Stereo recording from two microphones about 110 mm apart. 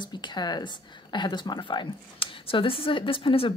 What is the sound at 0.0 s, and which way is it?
A woman's voice, 40° left (ahead or behind).